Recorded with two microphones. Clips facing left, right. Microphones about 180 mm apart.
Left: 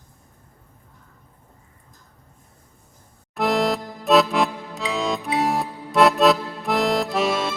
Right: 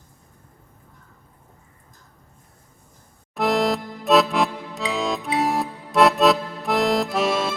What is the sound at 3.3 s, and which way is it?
Music, centre (ahead or behind).